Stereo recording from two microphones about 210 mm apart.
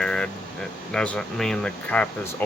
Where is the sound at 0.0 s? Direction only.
5° left (ahead or behind).